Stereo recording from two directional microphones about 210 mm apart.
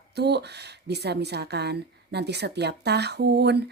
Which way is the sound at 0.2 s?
50° right (ahead or behind).